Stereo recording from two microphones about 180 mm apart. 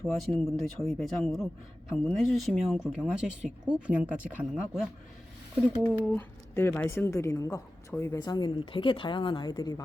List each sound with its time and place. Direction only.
0.2 s speech: centre (ahead or behind)
5.9 s a woman's voice: 10° left (ahead or behind)